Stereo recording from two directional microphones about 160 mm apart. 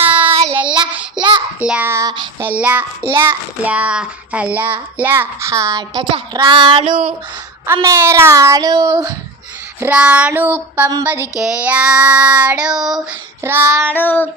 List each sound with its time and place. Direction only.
0.0 s child singing: 10° right (ahead or behind)
1.2 s child singing: 30° right (ahead or behind)
1.5 s child singing: 10° right (ahead or behind)
2.5 s child singing: 10° right (ahead or behind); by 7.1 s 35° right (ahead or behind)
7.7 s child singing: 15° right (ahead or behind)
9.8 s child singing: 10° right (ahead or behind)
13.4 s child singing: 15° right (ahead or behind)
13.9 s child singing: 10° left (ahead or behind)